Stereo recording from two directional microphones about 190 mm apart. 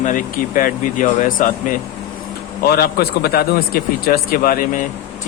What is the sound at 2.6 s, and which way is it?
A man's voice, 55° left (ahead or behind).